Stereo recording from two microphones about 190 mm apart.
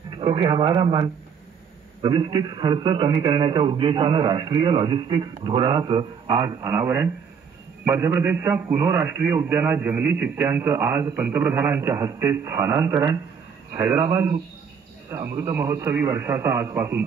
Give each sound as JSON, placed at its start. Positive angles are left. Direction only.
{"t": 0.2, "sound": "a man's voice", "side_deg": -25}